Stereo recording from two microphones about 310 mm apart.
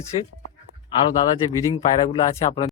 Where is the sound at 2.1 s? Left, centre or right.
Centre.